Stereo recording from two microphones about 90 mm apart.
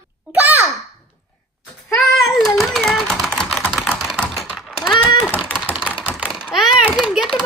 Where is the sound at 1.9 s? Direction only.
Centre (ahead or behind).